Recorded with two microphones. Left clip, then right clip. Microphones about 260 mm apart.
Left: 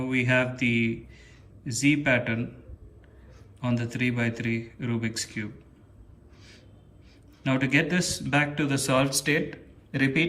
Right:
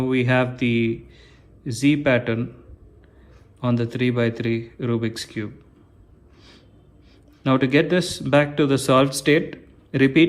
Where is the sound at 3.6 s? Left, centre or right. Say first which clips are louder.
Right 6 dB; centre.